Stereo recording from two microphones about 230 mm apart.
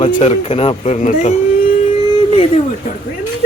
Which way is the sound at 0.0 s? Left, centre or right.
Left.